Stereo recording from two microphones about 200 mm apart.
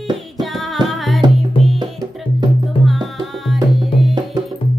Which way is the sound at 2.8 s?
Centre (ahead or behind).